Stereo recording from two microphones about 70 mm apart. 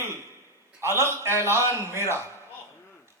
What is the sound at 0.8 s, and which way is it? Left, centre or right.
A man's voice, right.